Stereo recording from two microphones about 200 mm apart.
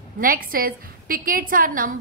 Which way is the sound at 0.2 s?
45° right (ahead or behind).